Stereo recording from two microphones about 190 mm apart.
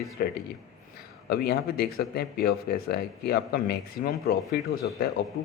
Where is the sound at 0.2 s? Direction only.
50° left (ahead or behind).